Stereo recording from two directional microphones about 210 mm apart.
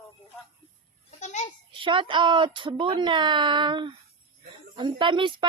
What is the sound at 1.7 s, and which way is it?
Speech, 25° right (ahead or behind).